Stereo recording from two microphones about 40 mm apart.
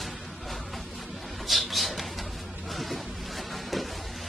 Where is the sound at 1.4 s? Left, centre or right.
Centre.